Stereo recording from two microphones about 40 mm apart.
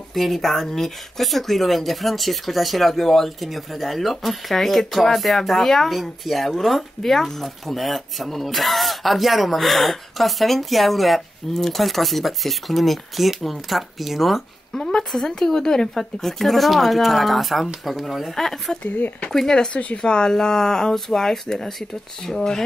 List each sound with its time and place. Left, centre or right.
0.1 s speech: centre
14.7 s speech: centre
18.3 s speech: centre
19.7 s speech: left
20.0 s speech: centre